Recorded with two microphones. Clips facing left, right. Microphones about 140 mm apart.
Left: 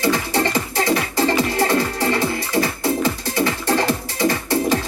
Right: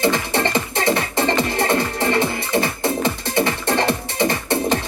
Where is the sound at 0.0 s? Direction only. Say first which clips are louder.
Even; 25° right (ahead or behind).